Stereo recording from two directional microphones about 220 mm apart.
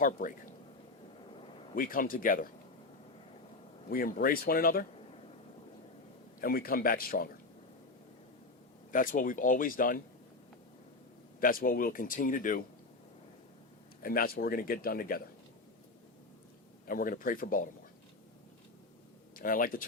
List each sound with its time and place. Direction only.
0.0 s speech: 40° left (ahead or behind)
1.4 s a sound: 25° left (ahead or behind)
1.7 s speech: 40° left (ahead or behind)
3.8 s speech: 40° left (ahead or behind)
6.4 s speech: 40° left (ahead or behind)
8.9 s speech: 40° left (ahead or behind)
11.3 s speech: 40° left (ahead or behind)
14.0 s speech: 40° left (ahead or behind)
16.8 s speech: 40° left (ahead or behind)
19.4 s speech: 40° left (ahead or behind)